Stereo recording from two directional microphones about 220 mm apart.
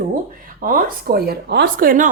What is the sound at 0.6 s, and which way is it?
Speech, 40° right (ahead or behind).